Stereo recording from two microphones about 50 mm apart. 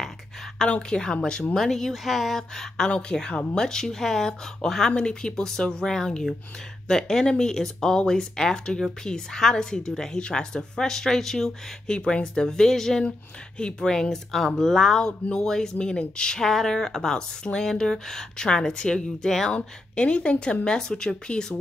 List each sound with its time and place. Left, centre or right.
0.7 s a woman's voice: left
16.4 s a woman's voice: centre
19.5 s a woman's voice: left